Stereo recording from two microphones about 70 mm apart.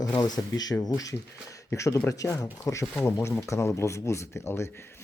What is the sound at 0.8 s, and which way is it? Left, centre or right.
Speech, left.